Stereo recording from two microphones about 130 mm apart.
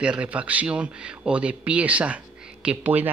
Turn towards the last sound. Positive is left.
turn(degrees=-10)  # may be behind; listen again after turning